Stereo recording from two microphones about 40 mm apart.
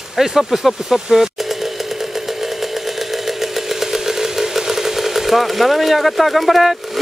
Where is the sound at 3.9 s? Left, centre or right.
Centre.